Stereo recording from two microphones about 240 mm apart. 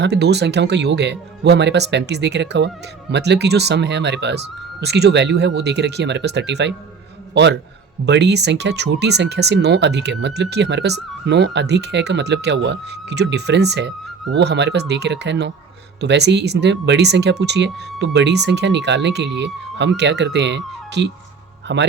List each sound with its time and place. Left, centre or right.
0.0 s speech: right
8.0 s speech: right